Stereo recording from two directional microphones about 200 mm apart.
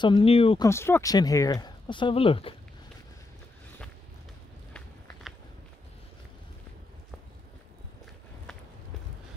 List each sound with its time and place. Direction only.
0.0 s speech: 25° left (ahead or behind)
0.7 s speech: 10° left (ahead or behind); by 2.5 s 30° left (ahead or behind)